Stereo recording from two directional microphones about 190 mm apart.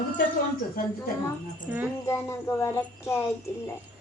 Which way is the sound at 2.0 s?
15° left (ahead or behind).